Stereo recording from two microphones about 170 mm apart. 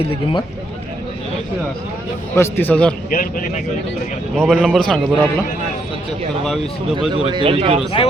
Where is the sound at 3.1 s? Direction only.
55° left (ahead or behind).